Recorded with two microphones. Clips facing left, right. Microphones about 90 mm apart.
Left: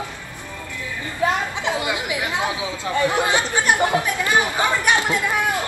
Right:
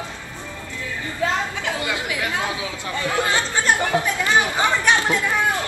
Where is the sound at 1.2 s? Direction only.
20° left (ahead or behind).